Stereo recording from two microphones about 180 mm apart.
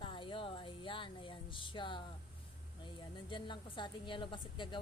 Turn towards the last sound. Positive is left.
turn(degrees=25)  # may be behind; listen again after turning